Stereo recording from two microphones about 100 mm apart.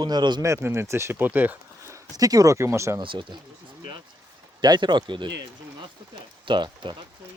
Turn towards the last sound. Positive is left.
turn(degrees=-50)  # may be behind; listen again after turning